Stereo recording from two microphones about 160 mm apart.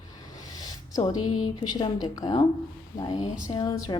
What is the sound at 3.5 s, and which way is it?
Speech, 25° left (ahead or behind).